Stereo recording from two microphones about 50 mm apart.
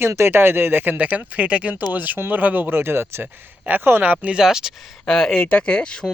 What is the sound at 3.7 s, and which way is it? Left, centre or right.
Speech, right.